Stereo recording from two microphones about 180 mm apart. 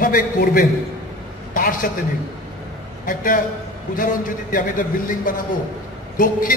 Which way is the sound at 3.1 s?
50° left (ahead or behind).